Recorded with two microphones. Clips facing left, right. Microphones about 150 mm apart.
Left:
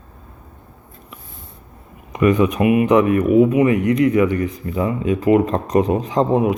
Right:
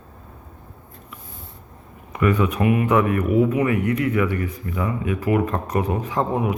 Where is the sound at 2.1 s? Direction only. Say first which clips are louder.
Left 5 dB; 15° left (ahead or behind).